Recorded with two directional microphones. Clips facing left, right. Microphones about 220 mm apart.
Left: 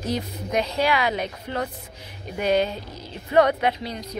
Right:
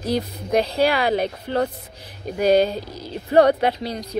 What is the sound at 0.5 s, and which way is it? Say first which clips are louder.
Speech: right 4 dB; 35° right (ahead or behind).